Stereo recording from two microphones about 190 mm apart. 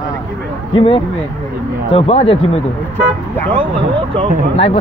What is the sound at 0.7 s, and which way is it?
Speech, 25° left (ahead or behind).